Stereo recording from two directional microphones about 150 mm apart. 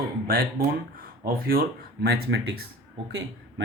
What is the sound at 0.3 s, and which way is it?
Speech, 75° right (ahead or behind).